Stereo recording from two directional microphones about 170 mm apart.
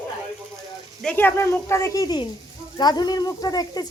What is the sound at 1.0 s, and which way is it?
A woman's voice, 10° left (ahead or behind).